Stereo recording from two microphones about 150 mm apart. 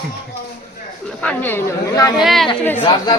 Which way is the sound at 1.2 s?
15° left (ahead or behind).